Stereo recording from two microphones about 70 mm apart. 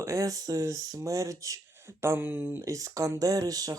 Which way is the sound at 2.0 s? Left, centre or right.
Right.